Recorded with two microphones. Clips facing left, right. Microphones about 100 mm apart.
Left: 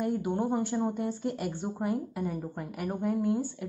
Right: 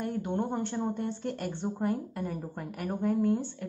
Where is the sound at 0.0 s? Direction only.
5° left (ahead or behind).